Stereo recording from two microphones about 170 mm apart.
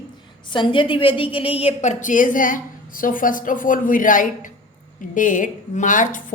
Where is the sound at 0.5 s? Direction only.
30° left (ahead or behind).